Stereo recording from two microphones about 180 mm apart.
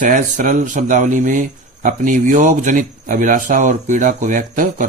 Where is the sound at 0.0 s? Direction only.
45° right (ahead or behind).